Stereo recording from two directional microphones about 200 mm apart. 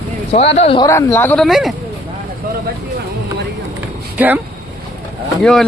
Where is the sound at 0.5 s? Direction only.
30° left (ahead or behind).